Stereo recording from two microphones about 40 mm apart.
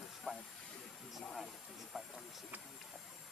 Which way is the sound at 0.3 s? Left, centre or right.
Left.